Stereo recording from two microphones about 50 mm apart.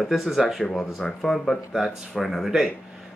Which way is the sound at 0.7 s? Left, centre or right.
Centre.